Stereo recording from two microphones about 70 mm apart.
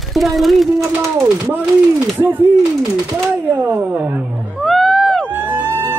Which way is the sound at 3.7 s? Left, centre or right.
Right.